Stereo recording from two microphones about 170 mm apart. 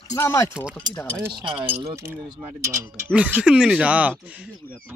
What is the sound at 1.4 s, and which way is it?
Speech, 30° right (ahead or behind).